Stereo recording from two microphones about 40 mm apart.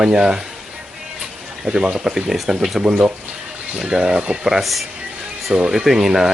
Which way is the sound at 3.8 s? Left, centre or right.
Right.